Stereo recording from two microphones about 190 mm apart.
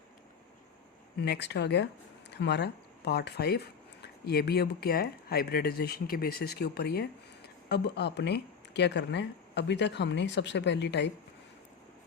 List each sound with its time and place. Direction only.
1.2 s speech: 65° left (ahead or behind)